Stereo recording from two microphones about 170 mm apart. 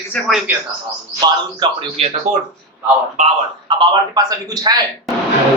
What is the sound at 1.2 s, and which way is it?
Speech, 25° right (ahead or behind).